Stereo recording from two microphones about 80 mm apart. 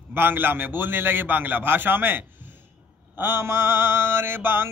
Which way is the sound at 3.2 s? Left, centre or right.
Right.